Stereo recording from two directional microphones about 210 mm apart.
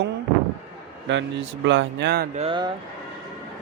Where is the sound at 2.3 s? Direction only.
25° right (ahead or behind).